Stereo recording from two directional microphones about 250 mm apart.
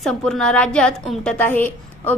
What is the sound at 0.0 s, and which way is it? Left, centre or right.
A woman's voice, centre.